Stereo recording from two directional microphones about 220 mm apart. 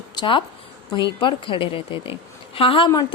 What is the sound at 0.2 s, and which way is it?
Speech, 20° left (ahead or behind).